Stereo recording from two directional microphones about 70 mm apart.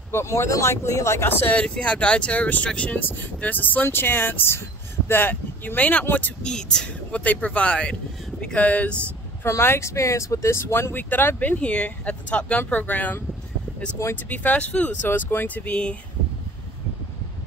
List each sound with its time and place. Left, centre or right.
0.1 s speech: left
1.3 s speech: left
1.6 s speech: centre
6.4 s speech: centre
9.4 s speech: left
14.0 s speech: left
14.3 s speech: left